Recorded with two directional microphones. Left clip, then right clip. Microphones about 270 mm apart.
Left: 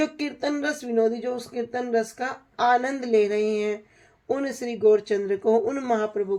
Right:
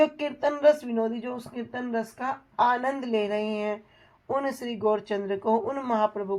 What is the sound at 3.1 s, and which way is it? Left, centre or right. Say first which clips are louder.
Speech: left 10 dB; centre.